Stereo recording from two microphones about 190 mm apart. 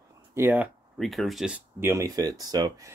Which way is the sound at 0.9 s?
Centre (ahead or behind).